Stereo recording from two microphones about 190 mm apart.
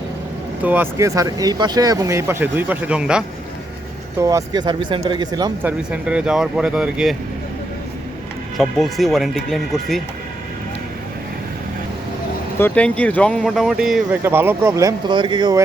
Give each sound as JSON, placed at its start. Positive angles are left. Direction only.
{"t": 0.6, "sound": "speech", "side_deg": -10}
{"t": 4.2, "sound": "speech", "side_deg": -15}
{"t": 5.6, "sound": "speech", "side_deg": -5}
{"t": 8.5, "sound": "speech", "side_deg": 0}
{"t": 12.5, "sound": "speech", "side_deg": 10}